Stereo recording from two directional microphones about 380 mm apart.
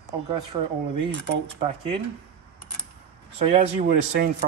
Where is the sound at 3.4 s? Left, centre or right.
Centre.